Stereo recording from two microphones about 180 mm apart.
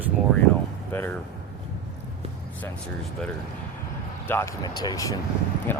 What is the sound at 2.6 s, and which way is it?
Speech, 5° left (ahead or behind).